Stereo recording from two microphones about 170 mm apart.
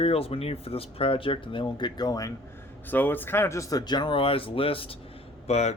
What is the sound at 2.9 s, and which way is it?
Speech, 10° left (ahead or behind).